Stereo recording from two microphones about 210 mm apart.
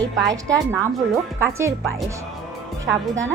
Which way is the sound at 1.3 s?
10° right (ahead or behind).